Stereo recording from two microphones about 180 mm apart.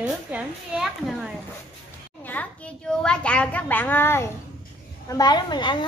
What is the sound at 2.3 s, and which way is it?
A child's voice, 10° left (ahead or behind).